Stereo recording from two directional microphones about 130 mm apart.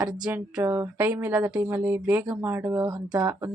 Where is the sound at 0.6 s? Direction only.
25° right (ahead or behind).